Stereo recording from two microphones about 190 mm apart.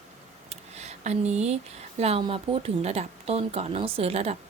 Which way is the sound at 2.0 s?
30° right (ahead or behind).